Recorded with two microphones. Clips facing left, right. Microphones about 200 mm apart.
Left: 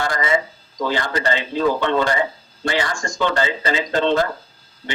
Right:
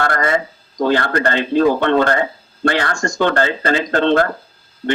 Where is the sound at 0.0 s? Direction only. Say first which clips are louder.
Right 3 dB; 60° right (ahead or behind).